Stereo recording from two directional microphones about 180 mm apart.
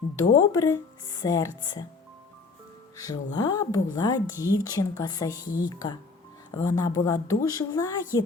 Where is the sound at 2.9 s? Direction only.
20° left (ahead or behind).